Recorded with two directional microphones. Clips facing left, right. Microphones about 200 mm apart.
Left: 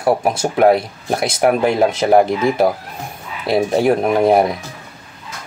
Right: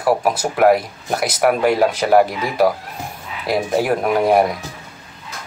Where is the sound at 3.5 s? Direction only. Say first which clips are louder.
Left 3 dB; 25° left (ahead or behind).